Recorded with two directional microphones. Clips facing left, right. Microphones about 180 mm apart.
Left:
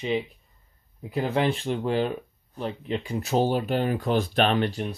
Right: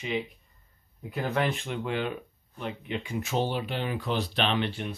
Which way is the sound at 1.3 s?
30° left (ahead or behind).